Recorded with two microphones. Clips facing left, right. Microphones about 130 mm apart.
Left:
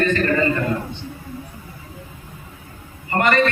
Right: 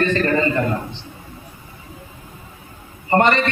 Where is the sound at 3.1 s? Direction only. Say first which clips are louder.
Right 3 dB; 30° right (ahead or behind).